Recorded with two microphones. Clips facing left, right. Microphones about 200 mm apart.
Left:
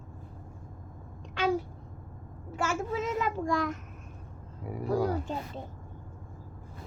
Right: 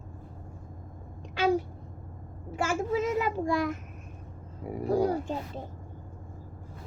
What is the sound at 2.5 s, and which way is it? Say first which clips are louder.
Child singing: right 2 dB; 15° right (ahead or behind).